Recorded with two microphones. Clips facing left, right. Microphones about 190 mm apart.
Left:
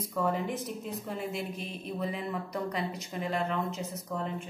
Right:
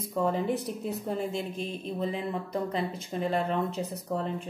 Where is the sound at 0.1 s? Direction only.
25° right (ahead or behind).